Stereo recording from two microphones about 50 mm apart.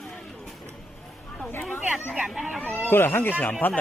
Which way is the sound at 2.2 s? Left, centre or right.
Centre.